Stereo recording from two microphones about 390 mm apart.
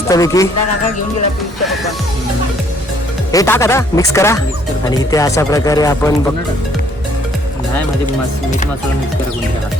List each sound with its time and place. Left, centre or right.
0.1 s speech: centre
3.3 s speech: centre